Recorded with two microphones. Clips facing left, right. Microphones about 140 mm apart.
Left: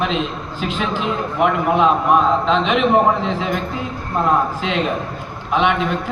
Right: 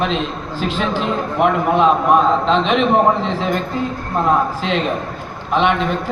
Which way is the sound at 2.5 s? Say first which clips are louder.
Right 1 dB; 35° right (ahead or behind).